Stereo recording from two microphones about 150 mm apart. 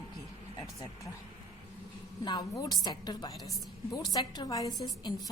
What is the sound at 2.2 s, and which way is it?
A woman's voice, 30° left (ahead or behind).